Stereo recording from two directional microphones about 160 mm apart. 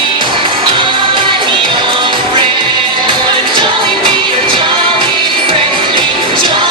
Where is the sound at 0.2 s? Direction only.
30° right (ahead or behind).